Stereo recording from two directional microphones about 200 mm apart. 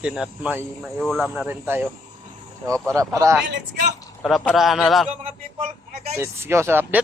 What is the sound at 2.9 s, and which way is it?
Speech, 15° right (ahead or behind).